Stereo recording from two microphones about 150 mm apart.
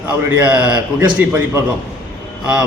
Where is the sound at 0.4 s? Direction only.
10° right (ahead or behind).